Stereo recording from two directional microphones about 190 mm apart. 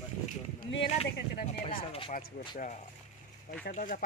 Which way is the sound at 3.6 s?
45° left (ahead or behind).